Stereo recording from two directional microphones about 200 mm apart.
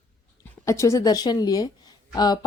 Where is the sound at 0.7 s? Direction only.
15° left (ahead or behind).